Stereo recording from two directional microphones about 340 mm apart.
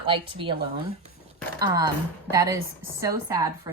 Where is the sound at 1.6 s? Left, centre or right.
Centre.